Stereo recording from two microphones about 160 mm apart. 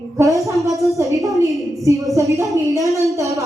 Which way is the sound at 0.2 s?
20° right (ahead or behind).